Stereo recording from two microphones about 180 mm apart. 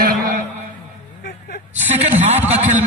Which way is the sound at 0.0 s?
50° right (ahead or behind).